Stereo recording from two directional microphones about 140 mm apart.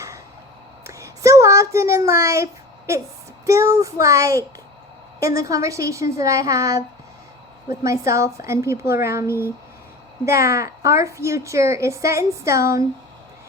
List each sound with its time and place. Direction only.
0.9 s a sound: 20° right (ahead or behind)
3.4 s a woman's voice: 20° right (ahead or behind)
7.9 s a woman's voice: 20° right (ahead or behind)